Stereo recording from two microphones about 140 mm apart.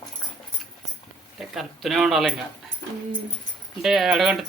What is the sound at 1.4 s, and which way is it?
Speech, centre (ahead or behind).